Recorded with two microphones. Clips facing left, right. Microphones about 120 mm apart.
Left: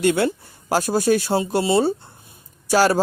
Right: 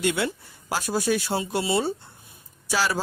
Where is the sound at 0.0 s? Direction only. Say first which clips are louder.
Left 6 dB; 45° left (ahead or behind).